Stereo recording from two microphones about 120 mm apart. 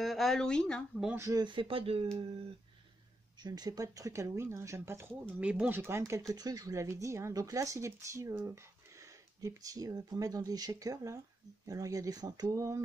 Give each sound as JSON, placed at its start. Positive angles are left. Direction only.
{"t": 0.0, "sound": "speech", "side_deg": 0}
{"t": 1.1, "sound": "speech", "side_deg": -25}
{"t": 1.4, "sound": "speech", "side_deg": -45}
{"t": 3.3, "sound": "speech", "side_deg": -35}